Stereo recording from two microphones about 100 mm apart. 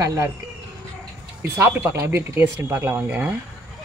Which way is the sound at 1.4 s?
20° right (ahead or behind).